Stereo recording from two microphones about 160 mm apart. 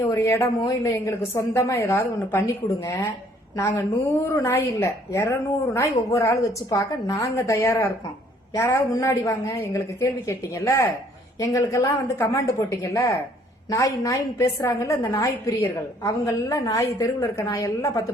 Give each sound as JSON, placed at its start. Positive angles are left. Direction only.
{"t": 0.0, "sound": "a woman's voice", "side_deg": 20}
{"t": 4.3, "sound": "a woman's voice", "side_deg": 15}